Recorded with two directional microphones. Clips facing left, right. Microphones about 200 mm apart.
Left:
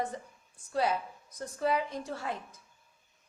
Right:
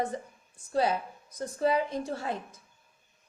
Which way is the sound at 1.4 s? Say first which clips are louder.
Right 3 dB; 30° right (ahead or behind).